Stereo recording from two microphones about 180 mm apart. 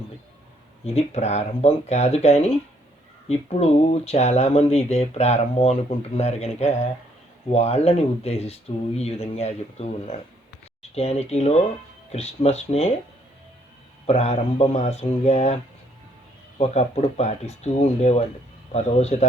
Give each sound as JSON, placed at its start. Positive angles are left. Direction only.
{"t": 0.9, "sound": "speech", "side_deg": 35}
{"t": 14.1, "sound": "speech", "side_deg": 35}
{"t": 16.6, "sound": "speech", "side_deg": 35}